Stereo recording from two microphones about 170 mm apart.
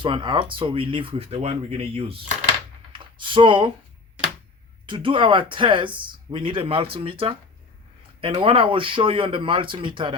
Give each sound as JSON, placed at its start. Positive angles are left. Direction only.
{"t": 0.0, "sound": "speech", "side_deg": -30}
{"t": 2.9, "sound": "a sound", "side_deg": -30}
{"t": 4.9, "sound": "speech", "side_deg": -30}